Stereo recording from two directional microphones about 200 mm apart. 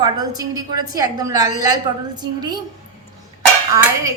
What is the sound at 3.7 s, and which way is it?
Speech, 15° right (ahead or behind).